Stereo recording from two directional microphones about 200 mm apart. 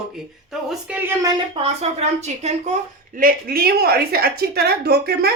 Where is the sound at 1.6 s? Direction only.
35° right (ahead or behind).